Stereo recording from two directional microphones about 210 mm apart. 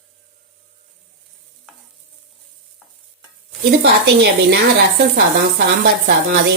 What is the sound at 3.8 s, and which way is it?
A woman's voice, 50° right (ahead or behind).